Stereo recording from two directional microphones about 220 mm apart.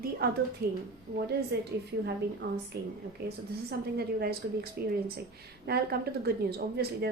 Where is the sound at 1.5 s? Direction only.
50° right (ahead or behind).